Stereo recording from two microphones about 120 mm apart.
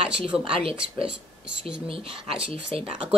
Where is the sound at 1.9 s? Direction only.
50° right (ahead or behind).